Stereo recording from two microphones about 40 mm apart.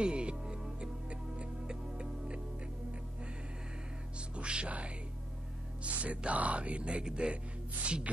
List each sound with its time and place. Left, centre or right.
0.0 s music: right
1.4 s hum: right
4.4 s music: right
5.9 s speech: right
7.8 s music: right